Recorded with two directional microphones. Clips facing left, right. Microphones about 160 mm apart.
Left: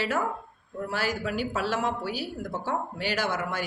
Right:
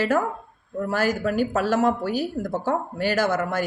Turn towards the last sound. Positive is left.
turn(degrees=-45)  # may be behind; listen again after turning